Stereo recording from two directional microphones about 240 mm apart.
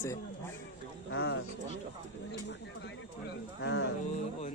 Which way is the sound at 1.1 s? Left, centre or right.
Left.